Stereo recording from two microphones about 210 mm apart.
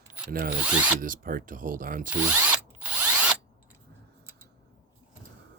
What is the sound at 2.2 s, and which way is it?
Ratchet, 10° right (ahead or behind).